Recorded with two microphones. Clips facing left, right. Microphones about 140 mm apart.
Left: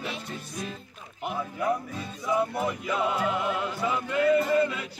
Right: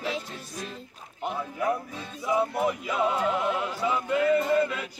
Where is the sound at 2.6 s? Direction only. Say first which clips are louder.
Right 2 dB; centre (ahead or behind).